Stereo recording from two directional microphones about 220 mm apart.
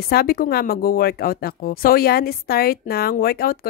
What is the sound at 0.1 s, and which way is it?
A woman's voice, 45° left (ahead or behind).